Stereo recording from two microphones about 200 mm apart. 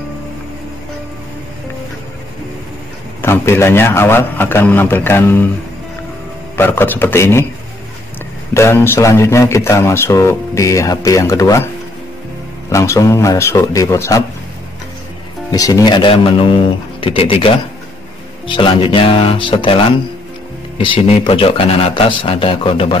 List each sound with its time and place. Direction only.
3.2 s speech: 10° left (ahead or behind)
6.5 s speech: 10° left (ahead or behind)
8.5 s speech: 10° left (ahead or behind)
15.5 s a man's voice: 20° left (ahead or behind)